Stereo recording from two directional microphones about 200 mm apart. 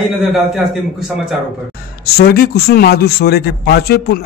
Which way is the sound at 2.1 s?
50° left (ahead or behind).